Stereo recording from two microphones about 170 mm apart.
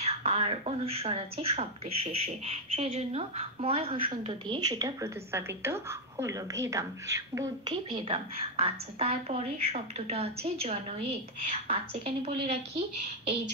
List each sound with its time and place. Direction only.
0.0 s a woman's voice: 35° right (ahead or behind); by 7.7 s 20° right (ahead or behind)
7.7 s a woman's voice: 30° right (ahead or behind)